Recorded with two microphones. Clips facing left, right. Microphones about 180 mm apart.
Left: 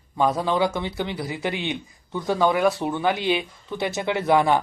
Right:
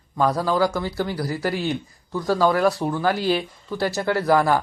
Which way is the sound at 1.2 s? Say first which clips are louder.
Right 3 dB; centre (ahead or behind).